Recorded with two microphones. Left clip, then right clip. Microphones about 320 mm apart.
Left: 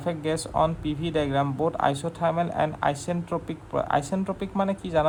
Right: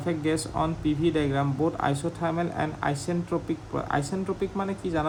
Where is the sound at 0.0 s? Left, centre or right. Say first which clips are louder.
Even; centre.